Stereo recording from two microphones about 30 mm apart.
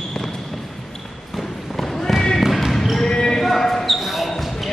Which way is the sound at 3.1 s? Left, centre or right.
Left.